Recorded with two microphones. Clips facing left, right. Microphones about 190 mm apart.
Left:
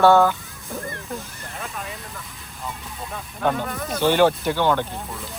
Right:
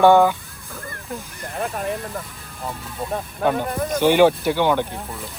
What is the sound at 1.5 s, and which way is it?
Speech, 50° right (ahead or behind).